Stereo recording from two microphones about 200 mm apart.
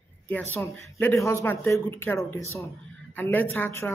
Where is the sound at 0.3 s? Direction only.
10° left (ahead or behind).